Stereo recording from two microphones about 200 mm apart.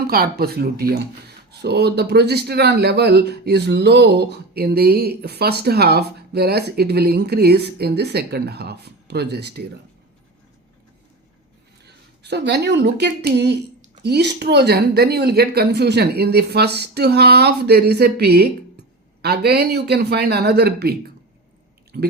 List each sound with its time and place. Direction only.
0.1 s speech: 50° right (ahead or behind)
11.9 s a woman's voice: 55° right (ahead or behind)